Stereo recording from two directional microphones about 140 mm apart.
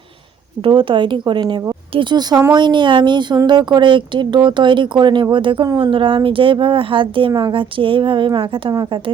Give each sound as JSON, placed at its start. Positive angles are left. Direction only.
{"t": 0.6, "sound": "a woman's voice", "side_deg": -35}